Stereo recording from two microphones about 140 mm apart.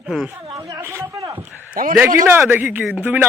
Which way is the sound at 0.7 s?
20° right (ahead or behind).